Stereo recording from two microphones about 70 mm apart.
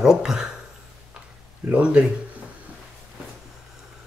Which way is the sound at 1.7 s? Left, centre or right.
Centre.